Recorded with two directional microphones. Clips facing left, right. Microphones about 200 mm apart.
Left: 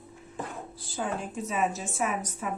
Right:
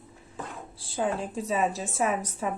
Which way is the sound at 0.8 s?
30° right (ahead or behind).